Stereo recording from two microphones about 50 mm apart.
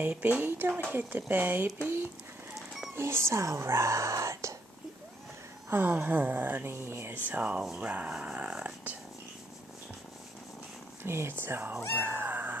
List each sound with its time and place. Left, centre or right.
0.0 s speech: right
3.0 s speech: right
5.7 s speech: right
7.2 s speech: right
8.1 s dog: centre
11.1 s speech: right
12.0 s cat: right